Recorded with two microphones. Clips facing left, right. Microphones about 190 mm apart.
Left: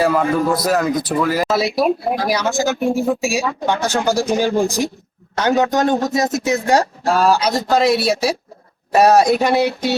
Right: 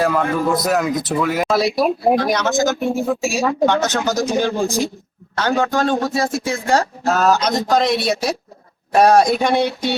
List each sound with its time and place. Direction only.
0.0 s a man's voice: 5° left (ahead or behind)